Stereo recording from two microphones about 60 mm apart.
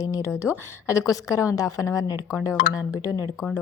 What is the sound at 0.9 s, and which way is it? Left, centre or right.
A woman's voice, left.